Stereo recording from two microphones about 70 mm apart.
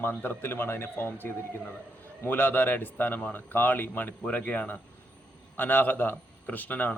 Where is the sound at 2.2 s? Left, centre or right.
Left.